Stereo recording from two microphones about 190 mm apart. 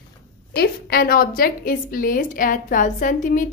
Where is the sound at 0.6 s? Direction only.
55° left (ahead or behind).